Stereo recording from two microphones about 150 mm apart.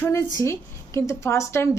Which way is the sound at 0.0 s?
15° left (ahead or behind).